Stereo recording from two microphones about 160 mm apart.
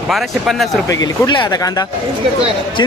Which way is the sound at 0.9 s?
25° left (ahead or behind).